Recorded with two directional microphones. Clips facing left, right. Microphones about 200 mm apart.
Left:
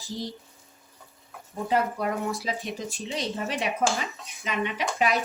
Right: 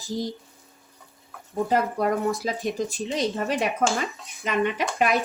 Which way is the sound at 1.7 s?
45° right (ahead or behind).